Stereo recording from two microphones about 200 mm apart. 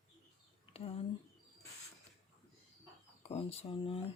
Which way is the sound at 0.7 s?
30° left (ahead or behind).